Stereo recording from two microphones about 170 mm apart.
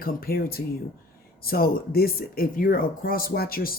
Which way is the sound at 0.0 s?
60° left (ahead or behind).